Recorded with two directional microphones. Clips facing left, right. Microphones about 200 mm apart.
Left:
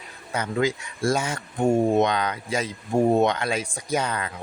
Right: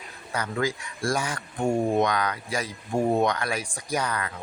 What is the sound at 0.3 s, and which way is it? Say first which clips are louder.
Speech: left 3 dB; 20° left (ahead or behind).